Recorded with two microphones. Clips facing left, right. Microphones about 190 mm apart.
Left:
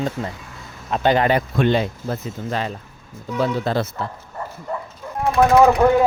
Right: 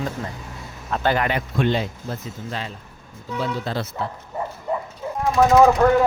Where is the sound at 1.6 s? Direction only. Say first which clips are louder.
Left 3 dB; 55° left (ahead or behind).